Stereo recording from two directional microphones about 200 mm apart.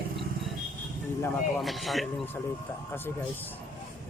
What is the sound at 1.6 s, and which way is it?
Speech, centre (ahead or behind).